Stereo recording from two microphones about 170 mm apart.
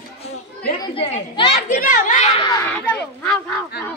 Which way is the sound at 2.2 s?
35° left (ahead or behind).